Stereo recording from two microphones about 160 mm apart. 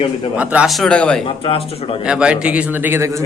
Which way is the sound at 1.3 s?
35° left (ahead or behind).